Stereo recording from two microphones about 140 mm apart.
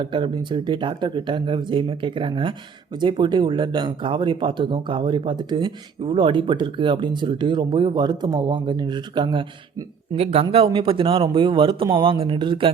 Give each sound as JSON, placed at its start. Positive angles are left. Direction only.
{"t": 0.0, "sound": "speech", "side_deg": -35}
{"t": 10.1, "sound": "speech", "side_deg": -45}